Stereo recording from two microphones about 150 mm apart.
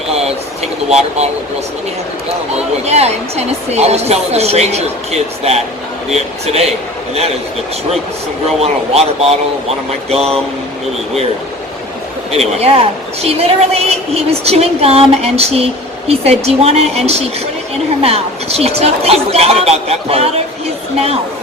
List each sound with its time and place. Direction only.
0.1 s a sound: 45° right (ahead or behind)
2.8 s a woman's voice: 45° right (ahead or behind)
6.4 s a woman's voice: 45° right (ahead or behind)
8.6 s a woman's voice: 45° right (ahead or behind)
12.3 s a woman's voice: 45° right (ahead or behind)